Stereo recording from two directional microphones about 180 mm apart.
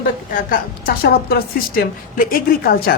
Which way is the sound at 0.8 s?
55° left (ahead or behind).